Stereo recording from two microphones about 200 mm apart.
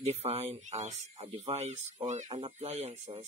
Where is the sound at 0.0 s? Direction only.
30° right (ahead or behind).